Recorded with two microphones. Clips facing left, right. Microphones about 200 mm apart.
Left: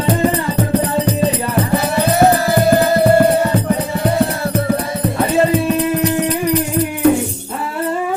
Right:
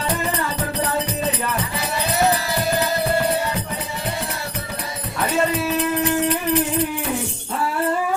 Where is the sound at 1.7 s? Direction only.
55° left (ahead or behind).